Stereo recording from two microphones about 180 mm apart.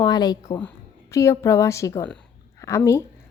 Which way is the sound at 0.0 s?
20° left (ahead or behind).